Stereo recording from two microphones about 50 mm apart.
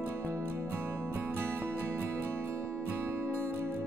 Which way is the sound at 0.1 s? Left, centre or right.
Right.